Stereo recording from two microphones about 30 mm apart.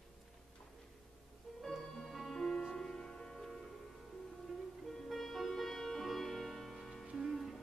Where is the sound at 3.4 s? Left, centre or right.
Centre.